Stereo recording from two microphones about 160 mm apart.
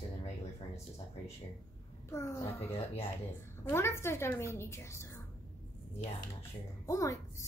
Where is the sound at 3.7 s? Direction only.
15° left (ahead or behind).